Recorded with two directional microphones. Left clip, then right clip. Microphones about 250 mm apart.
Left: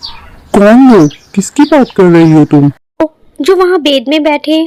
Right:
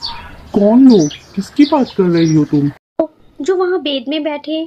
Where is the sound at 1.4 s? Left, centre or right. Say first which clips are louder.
Left 6 dB; left.